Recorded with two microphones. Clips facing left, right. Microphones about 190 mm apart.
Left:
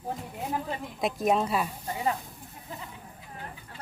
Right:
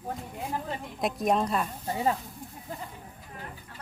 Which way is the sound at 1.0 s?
Centre (ahead or behind).